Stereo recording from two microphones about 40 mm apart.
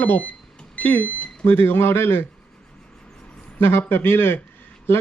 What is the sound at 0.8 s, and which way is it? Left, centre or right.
Smoke detector, left.